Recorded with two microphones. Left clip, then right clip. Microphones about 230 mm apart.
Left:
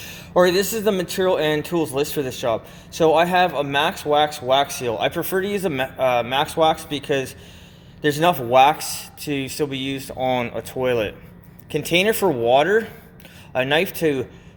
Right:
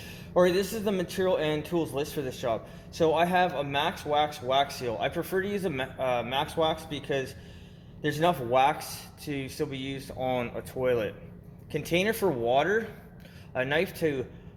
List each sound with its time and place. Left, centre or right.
0.0 s speech: left